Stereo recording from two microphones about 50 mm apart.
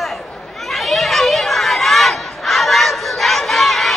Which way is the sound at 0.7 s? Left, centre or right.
Centre.